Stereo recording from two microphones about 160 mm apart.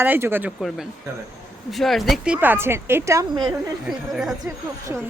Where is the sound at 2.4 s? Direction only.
15° right (ahead or behind).